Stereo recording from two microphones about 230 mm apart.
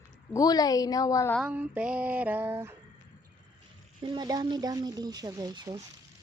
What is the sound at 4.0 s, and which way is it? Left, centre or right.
Speech, right.